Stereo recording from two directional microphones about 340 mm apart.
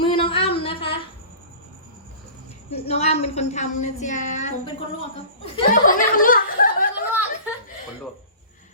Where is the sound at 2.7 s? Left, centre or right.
Centre.